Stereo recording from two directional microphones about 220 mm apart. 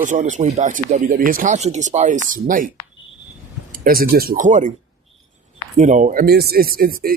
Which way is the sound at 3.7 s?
40° right (ahead or behind).